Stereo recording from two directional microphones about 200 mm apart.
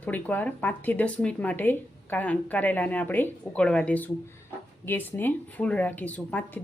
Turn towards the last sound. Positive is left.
turn(degrees=10)  # may be behind; listen again after turning